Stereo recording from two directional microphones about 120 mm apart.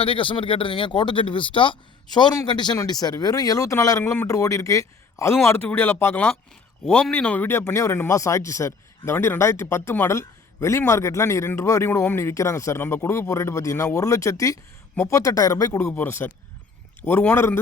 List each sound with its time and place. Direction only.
0.0 s a man's voice: 45° left (ahead or behind); by 6.3 s 20° left (ahead or behind)
6.8 s a man's voice: 5° left (ahead or behind); by 15.9 s 30° left (ahead or behind)
15.9 s speech: 20° left (ahead or behind)